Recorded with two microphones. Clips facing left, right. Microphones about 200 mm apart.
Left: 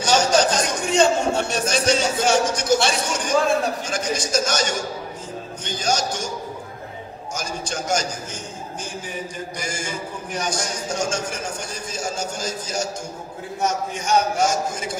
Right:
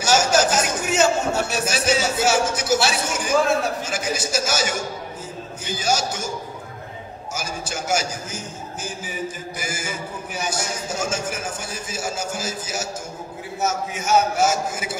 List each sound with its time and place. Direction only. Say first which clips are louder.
0.0 s a man's voice: left 1 dB; 5° right (ahead or behind)
7.3 s a man's voice: left 1 dB; 5° right (ahead or behind)
9.6 s a man's voice: even; 5° right (ahead or behind)